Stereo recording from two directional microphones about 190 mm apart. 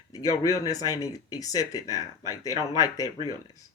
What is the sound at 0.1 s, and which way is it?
Speech, 20° left (ahead or behind).